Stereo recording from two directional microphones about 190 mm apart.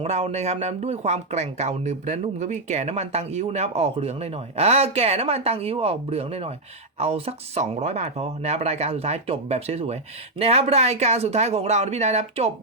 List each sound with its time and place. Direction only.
0.0 s speech: 35° right (ahead or behind)